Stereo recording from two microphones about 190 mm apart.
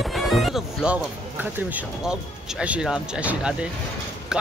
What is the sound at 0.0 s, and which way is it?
Speech, centre (ahead or behind).